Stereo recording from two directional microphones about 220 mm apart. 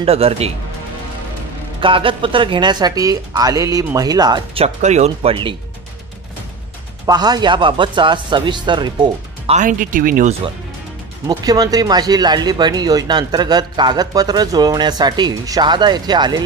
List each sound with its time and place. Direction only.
0.0 s speech: 25° right (ahead or behind)
1.8 s speech: 25° right (ahead or behind)
7.1 s speech: 20° right (ahead or behind)
9.6 s speech: 35° right (ahead or behind)
11.2 s speech: 15° right (ahead or behind)